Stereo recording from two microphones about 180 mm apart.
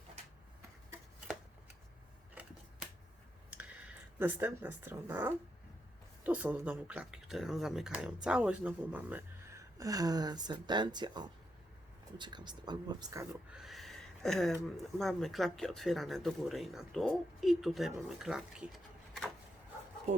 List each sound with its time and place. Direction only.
2.3 s scissors: 10° right (ahead or behind)
3.5 s speech: 5° right (ahead or behind)
13.5 s a sound: centre (ahead or behind)
14.9 s speech: centre (ahead or behind)